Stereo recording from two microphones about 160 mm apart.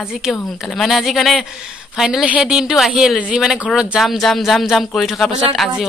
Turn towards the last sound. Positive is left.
turn(degrees=0)  # may be behind; listen again after turning